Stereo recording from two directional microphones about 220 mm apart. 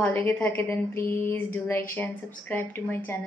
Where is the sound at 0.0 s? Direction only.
10° left (ahead or behind).